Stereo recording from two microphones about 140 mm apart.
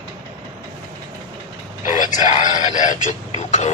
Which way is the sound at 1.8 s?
65° left (ahead or behind).